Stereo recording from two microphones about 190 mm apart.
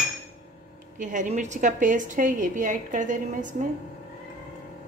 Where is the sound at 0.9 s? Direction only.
40° right (ahead or behind).